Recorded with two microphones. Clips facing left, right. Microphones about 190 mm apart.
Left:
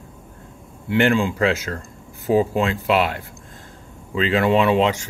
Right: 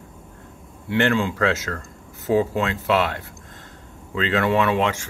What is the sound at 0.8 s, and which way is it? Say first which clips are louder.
Speech: left 2 dB; 10° left (ahead or behind).